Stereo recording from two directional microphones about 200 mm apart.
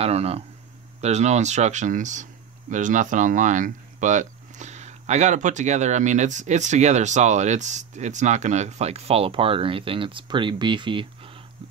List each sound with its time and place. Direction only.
0.0 s speech: 30° right (ahead or behind)